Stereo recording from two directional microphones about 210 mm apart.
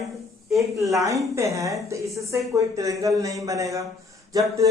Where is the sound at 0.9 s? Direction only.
15° right (ahead or behind).